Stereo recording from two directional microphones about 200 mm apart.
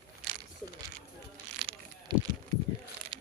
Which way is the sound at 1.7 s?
25° right (ahead or behind).